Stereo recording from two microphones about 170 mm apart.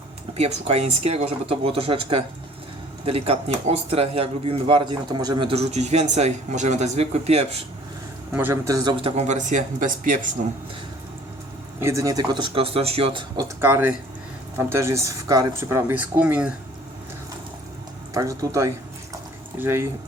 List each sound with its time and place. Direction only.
0.3 s speech: 40° right (ahead or behind)
8.3 s speech: 10° right (ahead or behind); by 10.2 s 50° right (ahead or behind)
11.8 s speech: 15° right (ahead or behind)
13.6 s speech: 15° right (ahead or behind)
18.1 s speech: 20° right (ahead or behind)